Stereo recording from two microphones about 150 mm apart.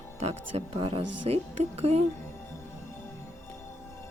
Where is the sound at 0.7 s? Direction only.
35° right (ahead or behind).